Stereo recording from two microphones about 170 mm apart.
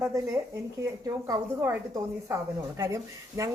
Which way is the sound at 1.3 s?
20° right (ahead or behind).